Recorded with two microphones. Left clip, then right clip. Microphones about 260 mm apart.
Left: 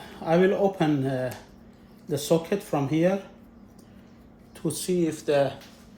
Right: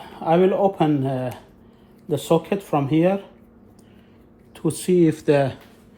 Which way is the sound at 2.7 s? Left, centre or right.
Right.